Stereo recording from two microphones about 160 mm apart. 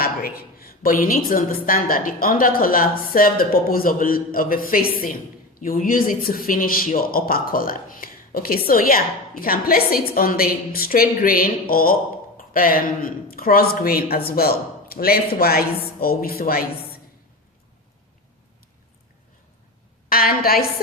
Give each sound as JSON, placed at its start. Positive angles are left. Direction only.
{"t": 0.0, "sound": "speech", "side_deg": 70}
{"t": 20.1, "sound": "speech", "side_deg": 65}